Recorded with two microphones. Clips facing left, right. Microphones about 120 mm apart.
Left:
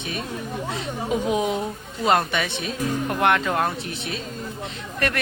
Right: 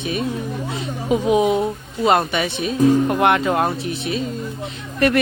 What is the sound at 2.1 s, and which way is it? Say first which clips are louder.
Speech: right 3 dB; 10° right (ahead or behind).